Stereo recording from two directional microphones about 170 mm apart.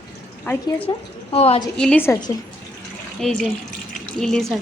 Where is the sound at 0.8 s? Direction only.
35° left (ahead or behind).